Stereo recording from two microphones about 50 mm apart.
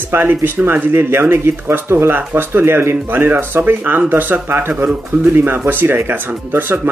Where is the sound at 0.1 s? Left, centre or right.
Right.